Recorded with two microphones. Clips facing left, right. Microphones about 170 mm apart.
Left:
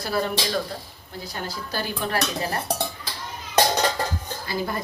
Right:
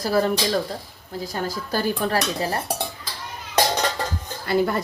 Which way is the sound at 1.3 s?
45° right (ahead or behind).